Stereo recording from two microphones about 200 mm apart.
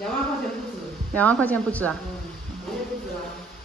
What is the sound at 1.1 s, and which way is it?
Speech, 5° left (ahead or behind).